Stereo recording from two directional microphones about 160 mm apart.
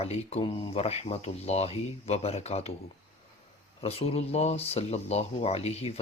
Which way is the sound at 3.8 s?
40° left (ahead or behind).